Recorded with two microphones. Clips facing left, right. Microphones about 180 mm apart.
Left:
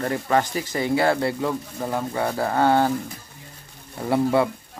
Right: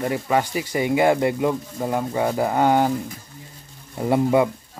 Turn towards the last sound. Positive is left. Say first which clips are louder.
# right 2 dB
turn(degrees=-15)  # may be behind; listen again after turning